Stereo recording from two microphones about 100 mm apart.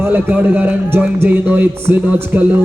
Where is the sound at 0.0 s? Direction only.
20° right (ahead or behind).